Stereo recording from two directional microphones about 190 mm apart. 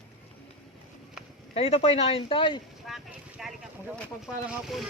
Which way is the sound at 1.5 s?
30° left (ahead or behind).